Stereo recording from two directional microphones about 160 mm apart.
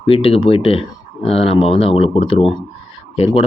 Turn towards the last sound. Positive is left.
turn(degrees=35)  # may be behind; listen again after turning